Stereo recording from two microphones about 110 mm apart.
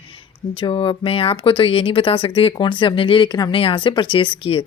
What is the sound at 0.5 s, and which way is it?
Speech, 50° left (ahead or behind).